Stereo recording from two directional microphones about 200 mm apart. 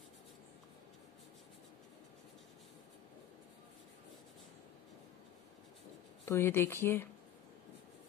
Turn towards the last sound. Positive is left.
turn(degrees=10)  # may be behind; listen again after turning